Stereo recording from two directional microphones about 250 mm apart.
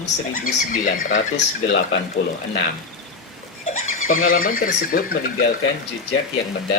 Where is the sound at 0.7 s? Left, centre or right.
Left.